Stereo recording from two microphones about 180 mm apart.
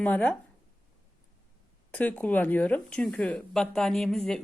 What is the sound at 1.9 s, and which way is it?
Speech, 10° left (ahead or behind).